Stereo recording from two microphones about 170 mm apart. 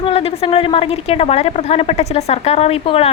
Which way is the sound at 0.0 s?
35° left (ahead or behind).